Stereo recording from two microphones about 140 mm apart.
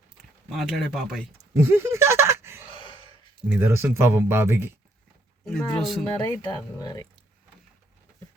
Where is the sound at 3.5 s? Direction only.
15° right (ahead or behind).